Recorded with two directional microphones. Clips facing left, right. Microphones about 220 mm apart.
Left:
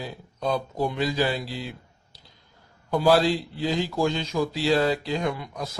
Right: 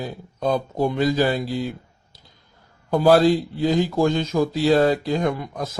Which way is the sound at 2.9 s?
45° right (ahead or behind).